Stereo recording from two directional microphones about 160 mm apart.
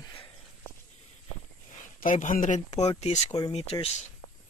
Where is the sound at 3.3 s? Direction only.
25° left (ahead or behind).